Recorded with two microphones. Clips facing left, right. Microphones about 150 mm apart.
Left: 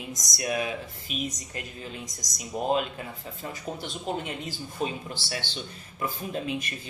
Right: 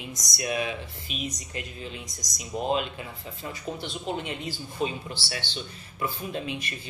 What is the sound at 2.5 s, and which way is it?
Speech, 45° left (ahead or behind).